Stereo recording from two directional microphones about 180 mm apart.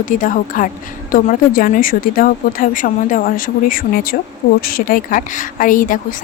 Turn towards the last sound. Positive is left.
turn(degrees=50)  # may be behind; listen again after turning